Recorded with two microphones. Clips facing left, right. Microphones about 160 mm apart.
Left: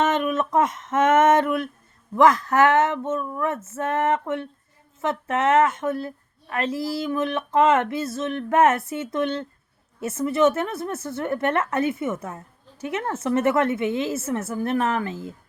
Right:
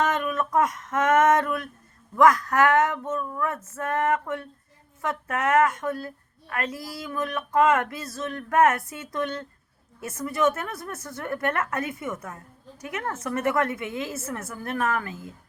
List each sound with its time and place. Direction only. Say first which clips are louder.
0.0 s female singing: left 3 dB; 25° left (ahead or behind)
2.1 s a woman's voice: left 2 dB; 25° left (ahead or behind)